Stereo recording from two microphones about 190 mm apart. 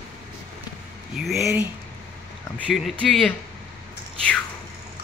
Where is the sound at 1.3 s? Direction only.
15° right (ahead or behind).